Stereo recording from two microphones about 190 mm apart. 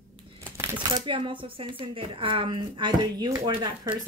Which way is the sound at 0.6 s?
25° right (ahead or behind).